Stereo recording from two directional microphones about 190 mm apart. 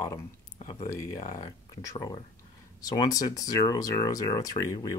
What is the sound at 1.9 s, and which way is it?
Speech, 20° left (ahead or behind).